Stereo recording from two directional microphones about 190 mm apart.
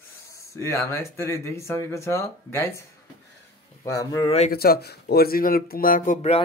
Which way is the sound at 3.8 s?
15° left (ahead or behind).